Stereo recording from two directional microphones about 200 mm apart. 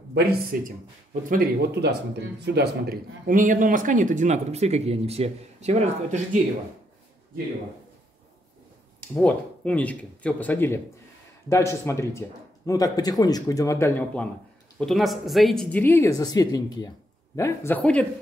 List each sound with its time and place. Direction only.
0.1 s speech: 50° right (ahead or behind)
9.1 s a woman's voice: 5° left (ahead or behind)